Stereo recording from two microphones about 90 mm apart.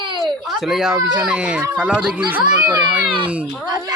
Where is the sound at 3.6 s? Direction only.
50° right (ahead or behind).